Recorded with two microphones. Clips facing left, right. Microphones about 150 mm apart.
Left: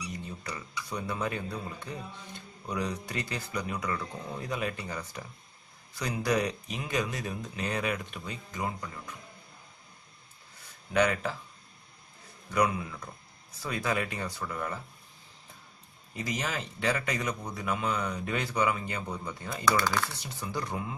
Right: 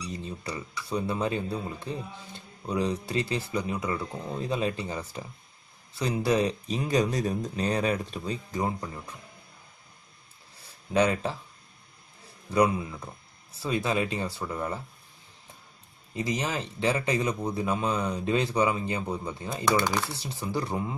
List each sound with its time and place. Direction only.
0.1 s speech: 25° right (ahead or behind)
10.9 s speech: 30° right (ahead or behind)
12.4 s speech: 25° right (ahead or behind)
16.2 s speech: 25° right (ahead or behind)